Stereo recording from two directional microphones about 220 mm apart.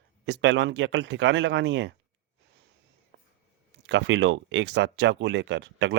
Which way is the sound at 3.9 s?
55° right (ahead or behind).